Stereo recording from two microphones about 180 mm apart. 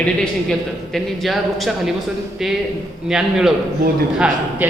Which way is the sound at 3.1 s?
5° right (ahead or behind).